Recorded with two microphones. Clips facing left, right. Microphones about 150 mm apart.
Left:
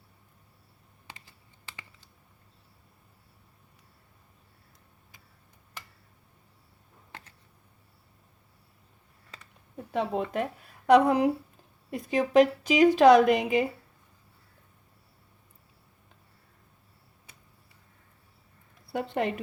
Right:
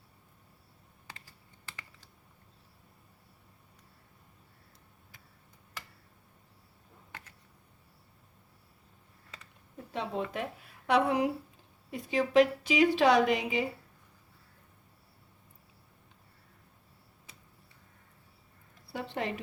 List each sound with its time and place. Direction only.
1.0 s computer keyboard: 20° left (ahead or behind)
9.9 s a woman's voice: 55° left (ahead or behind)
10.8 s a woman's voice: 40° left (ahead or behind)
18.9 s a sound: 60° left (ahead or behind)